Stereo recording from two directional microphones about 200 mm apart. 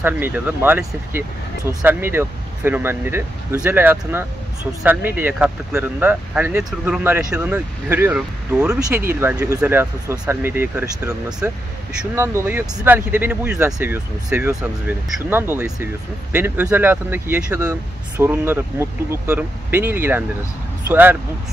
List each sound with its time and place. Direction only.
0.0 s speech: 10° right (ahead or behind)